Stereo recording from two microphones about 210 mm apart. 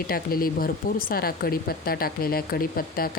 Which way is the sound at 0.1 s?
45° left (ahead or behind).